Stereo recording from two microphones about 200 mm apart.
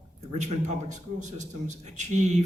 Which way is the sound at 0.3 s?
35° right (ahead or behind).